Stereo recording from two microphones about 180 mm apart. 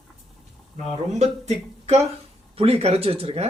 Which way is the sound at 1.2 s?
35° right (ahead or behind).